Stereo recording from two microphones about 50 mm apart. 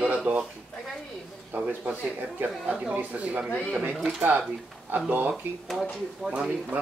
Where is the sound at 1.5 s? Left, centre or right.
Right.